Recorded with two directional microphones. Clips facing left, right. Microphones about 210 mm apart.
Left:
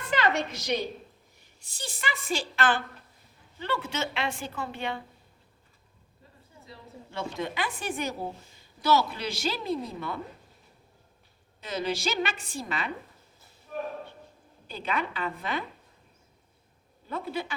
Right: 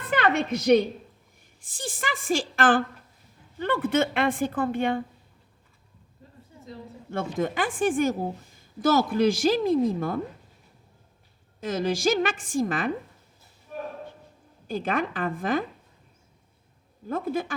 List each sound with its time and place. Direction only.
0.0 s a sound: 55° right (ahead or behind)
1.6 s a woman's voice: 50° right (ahead or behind)
6.7 s a woman's voice: 50° right (ahead or behind)
11.6 s a woman's voice: 45° right (ahead or behind)
14.7 s a woman's voice: 50° right (ahead or behind)
17.1 s a woman's voice: 50° right (ahead or behind)